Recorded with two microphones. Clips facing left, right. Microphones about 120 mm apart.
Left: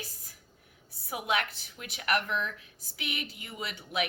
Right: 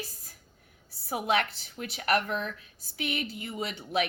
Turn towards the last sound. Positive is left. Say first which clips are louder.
# right 4 dB
turn(degrees=-25)  # may be behind; listen again after turning